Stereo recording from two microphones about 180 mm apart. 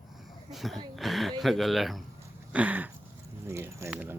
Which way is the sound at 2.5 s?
10° right (ahead or behind).